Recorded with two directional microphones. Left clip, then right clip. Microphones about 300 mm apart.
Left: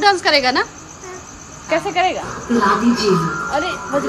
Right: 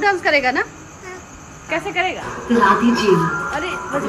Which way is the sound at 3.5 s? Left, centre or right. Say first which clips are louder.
Left 3 dB; left.